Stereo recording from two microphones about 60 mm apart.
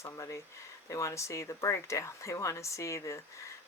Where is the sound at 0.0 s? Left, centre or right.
Left.